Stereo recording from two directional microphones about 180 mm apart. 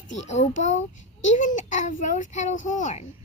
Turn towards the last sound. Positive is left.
turn(degrees=45)  # may be behind; listen again after turning